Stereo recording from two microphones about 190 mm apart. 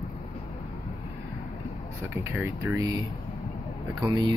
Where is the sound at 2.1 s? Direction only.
10° right (ahead or behind).